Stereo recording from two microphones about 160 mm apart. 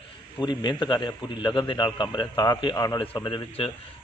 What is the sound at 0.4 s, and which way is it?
A man's voice, 30° left (ahead or behind).